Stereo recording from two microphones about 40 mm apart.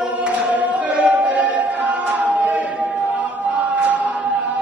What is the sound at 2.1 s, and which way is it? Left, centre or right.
Chant, right.